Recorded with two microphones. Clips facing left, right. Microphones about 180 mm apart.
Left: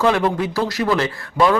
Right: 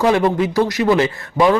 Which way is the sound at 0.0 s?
15° right (ahead or behind).